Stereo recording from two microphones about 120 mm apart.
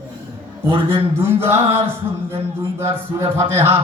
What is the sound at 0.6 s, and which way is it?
Speech, 45° right (ahead or behind).